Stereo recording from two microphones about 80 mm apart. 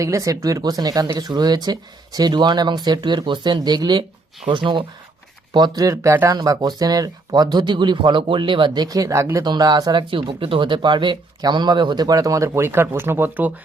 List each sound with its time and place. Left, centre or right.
0.0 s speech: right
4.4 s speech: right
5.5 s speech: right
6.3 s speech: right
9.4 s speech: right
10.0 s speech: right